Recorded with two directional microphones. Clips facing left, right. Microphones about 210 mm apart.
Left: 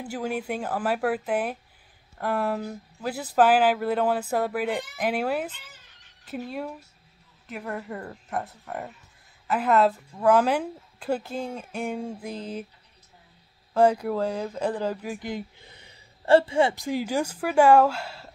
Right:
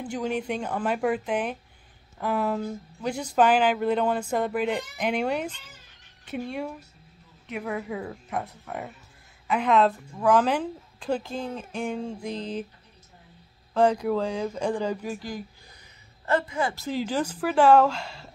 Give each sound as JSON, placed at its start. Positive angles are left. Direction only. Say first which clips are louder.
{"t": 0.0, "sound": "speech", "louder": "right 1 dB", "side_deg": 5}
{"t": 13.7, "sound": "speech", "louder": "left 1 dB", "side_deg": 5}
{"t": 15.1, "sound": "a sound", "louder": "left 2 dB", "side_deg": 20}
{"t": 16.7, "sound": "speech", "louder": "left 1 dB", "side_deg": 15}